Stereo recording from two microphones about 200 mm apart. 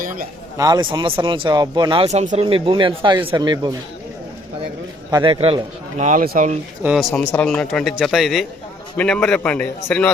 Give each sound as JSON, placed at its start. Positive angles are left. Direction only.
{"t": 0.0, "sound": "a sound", "side_deg": -45}
{"t": 0.5, "sound": "speech", "side_deg": -20}
{"t": 5.1, "sound": "a man's voice", "side_deg": -25}
{"t": 6.8, "sound": "a man's voice", "side_deg": 0}